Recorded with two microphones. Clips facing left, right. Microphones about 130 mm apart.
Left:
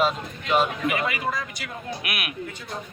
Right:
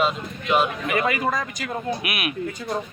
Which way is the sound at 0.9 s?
50° right (ahead or behind).